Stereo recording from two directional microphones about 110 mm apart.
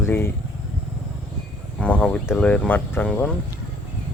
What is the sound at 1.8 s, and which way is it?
Speech, 10° left (ahead or behind).